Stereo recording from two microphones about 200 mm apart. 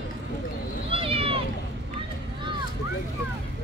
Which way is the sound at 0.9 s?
30° right (ahead or behind).